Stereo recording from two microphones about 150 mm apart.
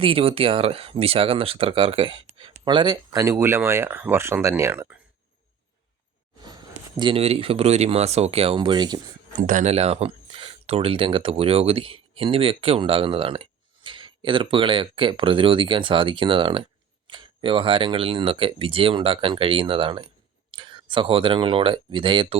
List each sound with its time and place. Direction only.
0.0 s speech: 40° right (ahead or behind); by 4.9 s 15° right (ahead or behind)
6.4 s speech: 30° right (ahead or behind)
9.4 s speech: 55° right (ahead or behind)
9.7 s speech: 45° right (ahead or behind)